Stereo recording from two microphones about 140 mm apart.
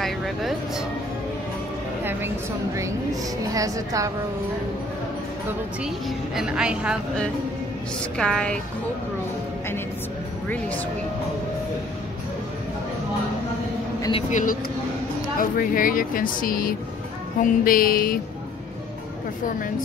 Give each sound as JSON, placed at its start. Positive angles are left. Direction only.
{"t": 0.0, "sound": "speech", "side_deg": 0}
{"t": 2.0, "sound": "a woman's voice", "side_deg": -20}
{"t": 5.9, "sound": "a woman's voice", "side_deg": 0}
{"t": 8.0, "sound": "a woman's voice", "side_deg": 5}
{"t": 14.3, "sound": "speech", "side_deg": 75}
{"t": 15.3, "sound": "a woman's voice", "side_deg": 85}
{"t": 17.4, "sound": "a sound", "side_deg": 90}